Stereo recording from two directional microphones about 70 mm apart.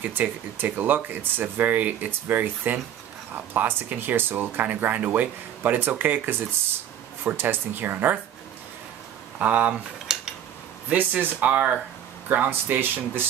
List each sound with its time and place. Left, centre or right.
0.2 s speech: right
9.4 s speech: right
10.1 s a sound: centre
10.9 s speech: right